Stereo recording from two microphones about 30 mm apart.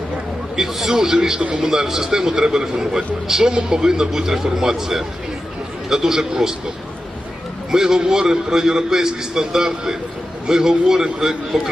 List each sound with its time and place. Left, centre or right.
0.5 s a man's voice: centre
1.4 s a man's voice: right
1.6 s a man's voice: centre
7.7 s a man's voice: centre